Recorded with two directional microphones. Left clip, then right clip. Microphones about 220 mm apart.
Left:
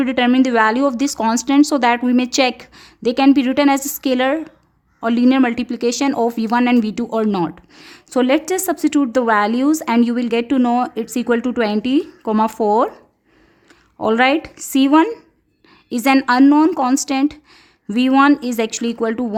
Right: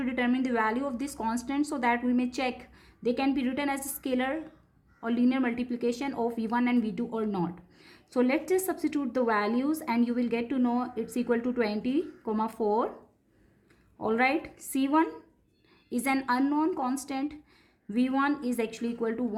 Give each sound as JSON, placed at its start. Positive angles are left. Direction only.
{"t": 0.0, "sound": "speech", "side_deg": 40}
{"t": 14.0, "sound": "speech", "side_deg": 40}